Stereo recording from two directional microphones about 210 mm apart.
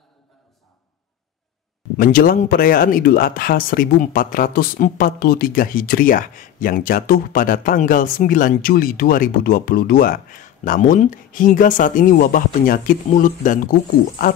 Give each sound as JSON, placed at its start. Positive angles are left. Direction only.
{"t": 2.0, "sound": "speech", "side_deg": 40}